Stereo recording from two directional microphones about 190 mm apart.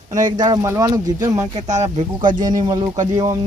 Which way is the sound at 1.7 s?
40° right (ahead or behind).